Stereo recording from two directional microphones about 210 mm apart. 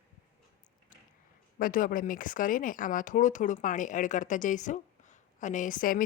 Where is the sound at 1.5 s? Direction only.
40° left (ahead or behind).